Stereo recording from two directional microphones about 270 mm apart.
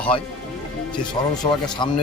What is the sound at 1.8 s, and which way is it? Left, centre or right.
Speech, centre.